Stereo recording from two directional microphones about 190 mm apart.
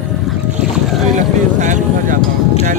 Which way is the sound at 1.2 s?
40° right (ahead or behind).